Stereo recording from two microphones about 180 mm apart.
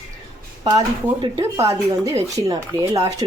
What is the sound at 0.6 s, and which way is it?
Speech, 20° right (ahead or behind).